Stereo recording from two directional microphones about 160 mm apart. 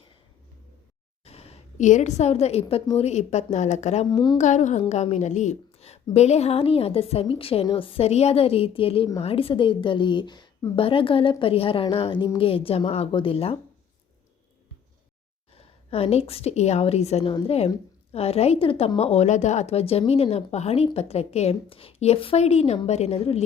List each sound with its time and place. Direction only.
1.2 s a woman's voice: 40° left (ahead or behind)
4.1 s a woman's voice: 25° left (ahead or behind)
4.4 s speech: 50° left (ahead or behind)
4.8 s a woman's voice: 40° left (ahead or behind)
15.5 s a woman's voice: 35° left (ahead or behind)